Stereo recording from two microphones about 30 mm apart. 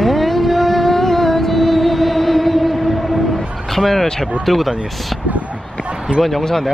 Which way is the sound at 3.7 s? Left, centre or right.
Centre.